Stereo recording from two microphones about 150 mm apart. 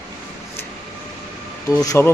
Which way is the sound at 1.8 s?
15° left (ahead or behind).